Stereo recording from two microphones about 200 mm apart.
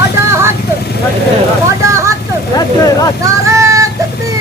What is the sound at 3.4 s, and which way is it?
Child singing, 15° right (ahead or behind).